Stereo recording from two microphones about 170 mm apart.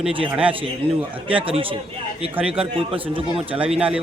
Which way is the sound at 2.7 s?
30° right (ahead or behind).